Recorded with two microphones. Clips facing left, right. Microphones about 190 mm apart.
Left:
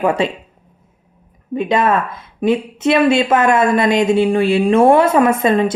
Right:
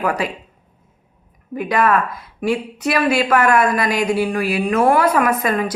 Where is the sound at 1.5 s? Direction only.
25° left (ahead or behind).